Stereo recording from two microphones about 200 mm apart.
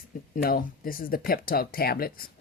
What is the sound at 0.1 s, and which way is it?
Speech, 45° left (ahead or behind).